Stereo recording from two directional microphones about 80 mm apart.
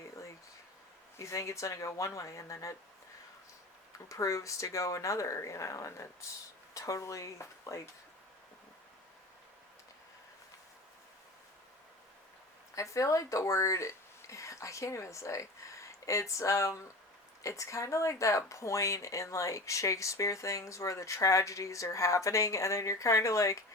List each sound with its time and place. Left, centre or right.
1.1 s speech: left
4.1 s speech: left
12.7 s speech: left